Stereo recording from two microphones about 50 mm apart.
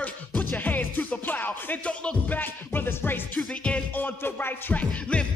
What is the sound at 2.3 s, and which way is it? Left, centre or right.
Music, left.